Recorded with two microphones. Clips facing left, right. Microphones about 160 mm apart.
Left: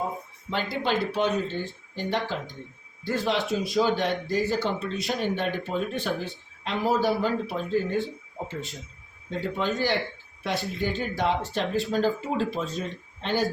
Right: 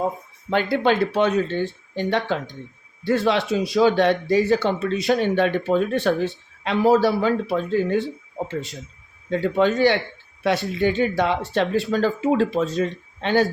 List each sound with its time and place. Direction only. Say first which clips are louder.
0.5 s speech: right 7 dB; 60° right (ahead or behind); by 13.4 s 80° right